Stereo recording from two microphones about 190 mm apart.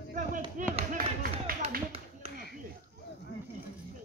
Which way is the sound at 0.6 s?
40° right (ahead or behind).